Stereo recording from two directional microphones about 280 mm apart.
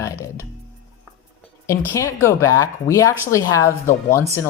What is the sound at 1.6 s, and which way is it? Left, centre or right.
Speech, centre.